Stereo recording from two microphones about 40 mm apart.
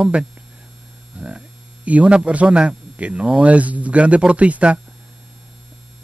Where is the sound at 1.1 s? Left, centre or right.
Right.